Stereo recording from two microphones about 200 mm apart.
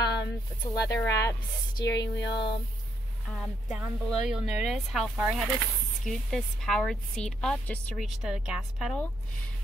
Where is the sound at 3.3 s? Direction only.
Centre (ahead or behind).